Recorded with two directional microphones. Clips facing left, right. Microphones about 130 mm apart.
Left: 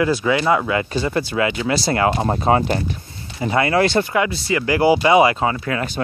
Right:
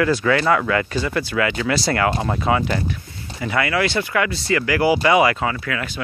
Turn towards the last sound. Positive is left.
turn(degrees=25)  # may be behind; listen again after turning